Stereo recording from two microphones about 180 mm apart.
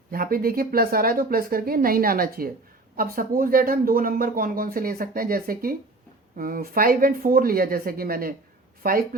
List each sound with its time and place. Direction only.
0.1 s speech: 55° right (ahead or behind)